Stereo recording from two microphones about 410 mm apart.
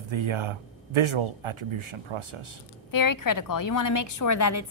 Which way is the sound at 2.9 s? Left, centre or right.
Left.